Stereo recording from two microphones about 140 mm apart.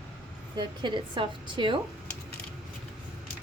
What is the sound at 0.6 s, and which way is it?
A woman's voice, 35° right (ahead or behind).